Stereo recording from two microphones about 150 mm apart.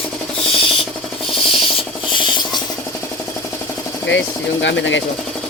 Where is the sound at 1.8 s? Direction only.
35° left (ahead or behind).